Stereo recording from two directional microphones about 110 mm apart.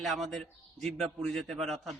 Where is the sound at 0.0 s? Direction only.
Centre (ahead or behind).